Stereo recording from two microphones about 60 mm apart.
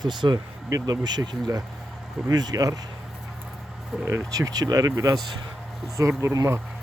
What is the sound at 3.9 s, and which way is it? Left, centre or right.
Speech, centre.